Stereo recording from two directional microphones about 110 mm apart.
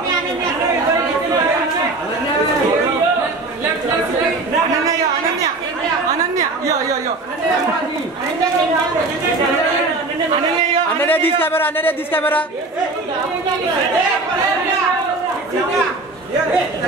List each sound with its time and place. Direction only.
11.1 s speech: 15° left (ahead or behind)